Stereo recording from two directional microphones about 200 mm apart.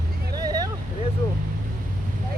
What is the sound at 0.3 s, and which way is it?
Vehicle, 20° right (ahead or behind).